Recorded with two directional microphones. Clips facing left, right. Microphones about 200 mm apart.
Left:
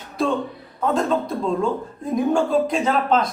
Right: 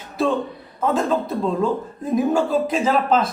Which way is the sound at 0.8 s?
Centre (ahead or behind).